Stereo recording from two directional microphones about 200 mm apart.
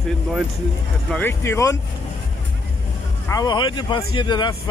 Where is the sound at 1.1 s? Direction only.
10° left (ahead or behind).